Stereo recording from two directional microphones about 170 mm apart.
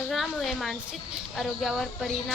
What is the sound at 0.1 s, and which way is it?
A woman's voice, centre (ahead or behind).